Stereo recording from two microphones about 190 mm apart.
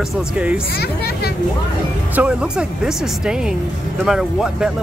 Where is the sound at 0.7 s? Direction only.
60° left (ahead or behind).